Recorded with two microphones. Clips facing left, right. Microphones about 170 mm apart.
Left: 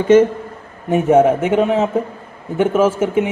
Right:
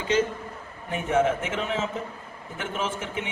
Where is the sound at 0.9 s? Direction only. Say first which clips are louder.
Left 11 dB; 40° left (ahead or behind).